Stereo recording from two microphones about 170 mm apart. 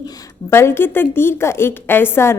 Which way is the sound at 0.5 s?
15° left (ahead or behind).